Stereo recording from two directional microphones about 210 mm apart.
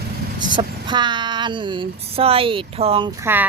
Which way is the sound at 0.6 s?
20° right (ahead or behind).